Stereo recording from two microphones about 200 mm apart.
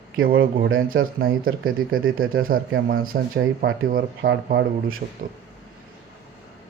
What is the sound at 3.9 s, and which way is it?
Speech, 60° right (ahead or behind).